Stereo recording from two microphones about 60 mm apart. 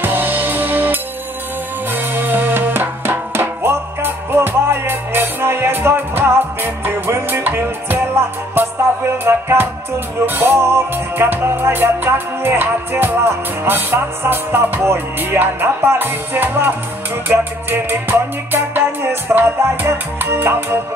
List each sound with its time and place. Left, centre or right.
0.0 s music: right
20.2 s music: right
20.4 s music: right